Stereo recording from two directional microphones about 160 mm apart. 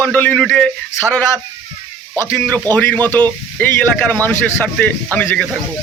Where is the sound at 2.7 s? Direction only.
10° left (ahead or behind).